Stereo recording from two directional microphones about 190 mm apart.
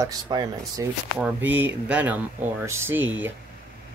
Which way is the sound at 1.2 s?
10° right (ahead or behind).